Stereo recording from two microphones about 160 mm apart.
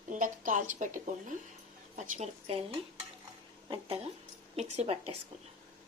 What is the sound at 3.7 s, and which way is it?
Speech, 35° right (ahead or behind).